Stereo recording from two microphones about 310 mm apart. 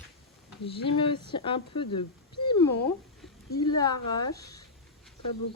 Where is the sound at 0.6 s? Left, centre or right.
Centre.